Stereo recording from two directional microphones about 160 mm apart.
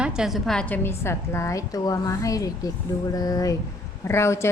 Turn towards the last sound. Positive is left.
turn(degrees=15)  # may be behind; listen again after turning